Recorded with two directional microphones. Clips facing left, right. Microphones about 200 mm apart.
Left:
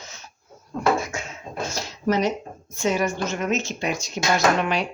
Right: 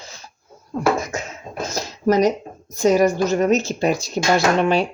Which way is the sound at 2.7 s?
40° right (ahead or behind).